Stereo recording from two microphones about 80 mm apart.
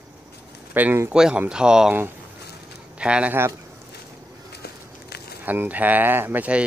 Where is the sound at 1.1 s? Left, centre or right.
Centre.